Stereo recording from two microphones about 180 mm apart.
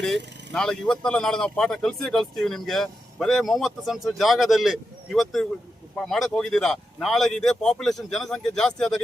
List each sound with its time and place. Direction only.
0.5 s speech: 5° left (ahead or behind)